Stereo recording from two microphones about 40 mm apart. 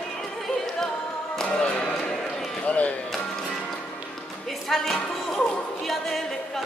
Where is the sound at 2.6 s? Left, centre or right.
Left.